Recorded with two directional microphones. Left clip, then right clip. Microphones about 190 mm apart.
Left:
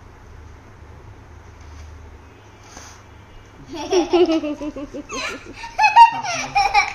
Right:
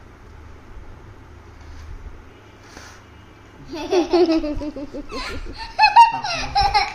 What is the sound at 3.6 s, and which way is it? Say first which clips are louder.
Laughter: left 1 dB; 10° left (ahead or behind).